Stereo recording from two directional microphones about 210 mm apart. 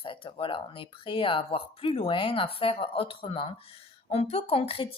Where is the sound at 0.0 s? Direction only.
25° left (ahead or behind).